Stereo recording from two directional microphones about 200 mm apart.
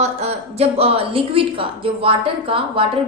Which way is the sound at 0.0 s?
30° right (ahead or behind).